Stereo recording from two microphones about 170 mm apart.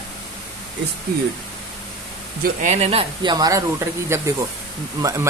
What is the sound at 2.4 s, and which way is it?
Speech, 45° right (ahead or behind).